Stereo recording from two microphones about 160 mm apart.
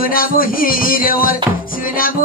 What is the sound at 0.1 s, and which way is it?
Music, 65° left (ahead or behind).